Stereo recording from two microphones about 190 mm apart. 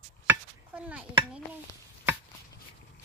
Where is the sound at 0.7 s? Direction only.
5° right (ahead or behind).